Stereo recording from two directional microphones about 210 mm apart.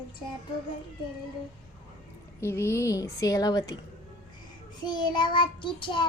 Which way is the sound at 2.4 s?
15° left (ahead or behind).